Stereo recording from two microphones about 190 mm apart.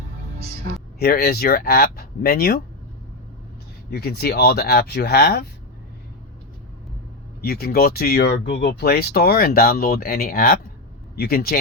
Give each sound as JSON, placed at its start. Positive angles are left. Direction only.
{"t": 0.9, "sound": "speech", "side_deg": 55}
{"t": 3.9, "sound": "speech", "side_deg": 55}
{"t": 7.4, "sound": "speech", "side_deg": 55}